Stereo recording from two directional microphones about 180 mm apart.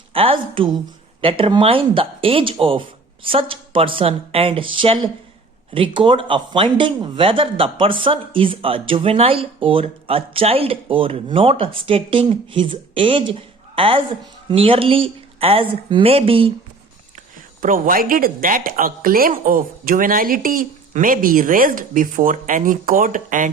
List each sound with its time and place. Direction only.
0.1 s speech: 30° right (ahead or behind)
17.6 s speech: 50° right (ahead or behind)